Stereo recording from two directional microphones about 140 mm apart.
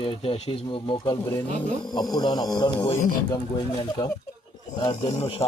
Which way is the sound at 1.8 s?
30° left (ahead or behind).